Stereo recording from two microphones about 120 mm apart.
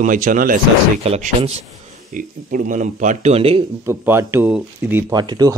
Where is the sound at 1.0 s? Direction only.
60° right (ahead or behind).